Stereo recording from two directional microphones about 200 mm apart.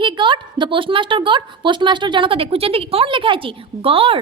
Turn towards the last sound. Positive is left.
turn(degrees=-25)  # may be behind; listen again after turning